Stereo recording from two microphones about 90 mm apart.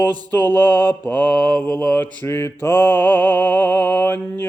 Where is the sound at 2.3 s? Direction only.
30° left (ahead or behind).